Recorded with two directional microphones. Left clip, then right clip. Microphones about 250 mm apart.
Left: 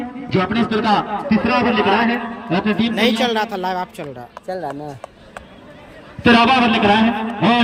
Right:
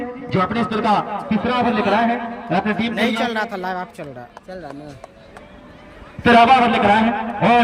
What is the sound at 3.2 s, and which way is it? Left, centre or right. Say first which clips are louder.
Speech: left 3 dB; centre.